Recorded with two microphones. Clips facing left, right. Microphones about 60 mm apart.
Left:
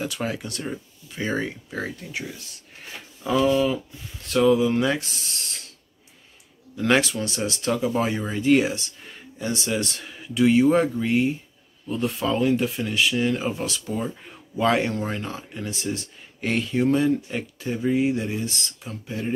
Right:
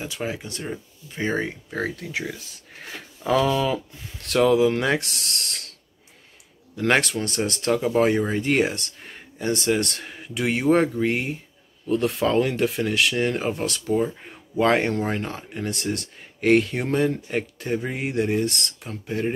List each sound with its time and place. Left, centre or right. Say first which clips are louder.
0.0 s speech: left 2 dB; centre
1.1 s speech: right 1 dB; right
2.0 s speech: right 3 dB; right
6.8 s speech: even; right
12.2 s speech: left 2 dB; right
13.1 s speech: even; right